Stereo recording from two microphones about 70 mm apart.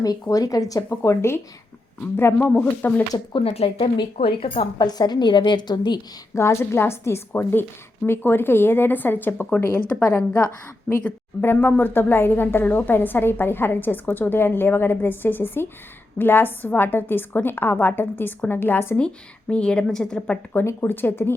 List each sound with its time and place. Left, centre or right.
0.0 s speech: left
0.9 s a woman's voice: left
2.5 s a woman's voice: left
4.8 s a woman's voice: left
6.3 s a woman's voice: left
18.9 s a woman's voice: centre; by 21.3 s left